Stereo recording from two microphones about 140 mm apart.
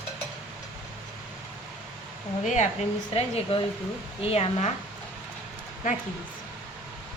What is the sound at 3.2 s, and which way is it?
A woman's voice, 45° left (ahead or behind).